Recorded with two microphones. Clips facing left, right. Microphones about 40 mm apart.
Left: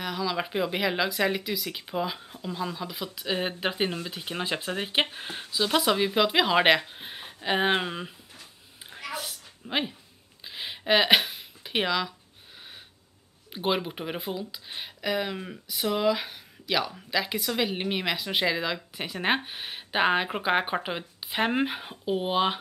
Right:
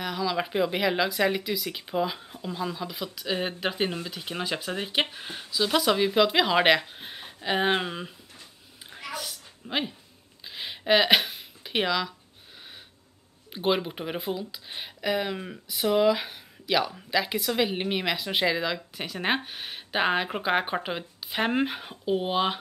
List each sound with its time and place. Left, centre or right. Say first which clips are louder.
0.0 s speech: right 1 dB; centre
9.1 s dog: even; centre
9.7 s speech: left 1 dB; centre
10.5 s a sound: right 1 dB; centre
13.5 s speech: right 2 dB; centre